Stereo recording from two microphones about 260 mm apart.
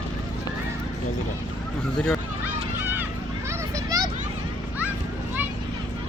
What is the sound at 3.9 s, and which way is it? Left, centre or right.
Children playing, centre.